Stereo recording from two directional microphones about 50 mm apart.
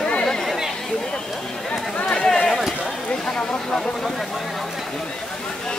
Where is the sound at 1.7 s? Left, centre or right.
Left.